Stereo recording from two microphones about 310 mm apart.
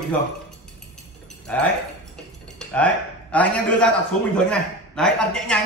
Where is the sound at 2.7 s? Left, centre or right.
Centre.